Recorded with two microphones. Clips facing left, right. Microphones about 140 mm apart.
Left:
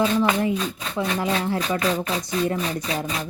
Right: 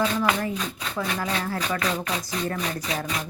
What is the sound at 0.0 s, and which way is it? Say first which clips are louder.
Speech: left 4 dB; 20° left (ahead or behind).